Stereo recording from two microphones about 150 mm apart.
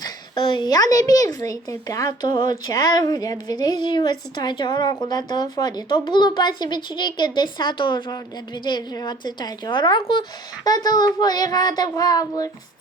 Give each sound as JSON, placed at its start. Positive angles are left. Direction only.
{"t": 0.0, "sound": "a woman's voice", "side_deg": 35}